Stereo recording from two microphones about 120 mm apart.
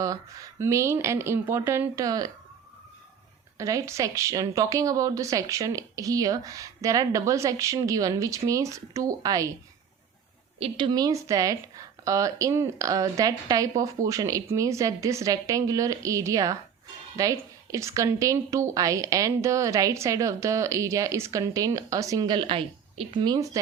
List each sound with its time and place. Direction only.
0.0 s a woman's voice: 30° right (ahead or behind)
3.6 s a woman's voice: 25° right (ahead or behind)
10.6 s a woman's voice: 40° right (ahead or behind)